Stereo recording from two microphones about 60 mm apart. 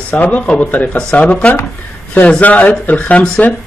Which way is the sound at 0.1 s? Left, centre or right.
Left.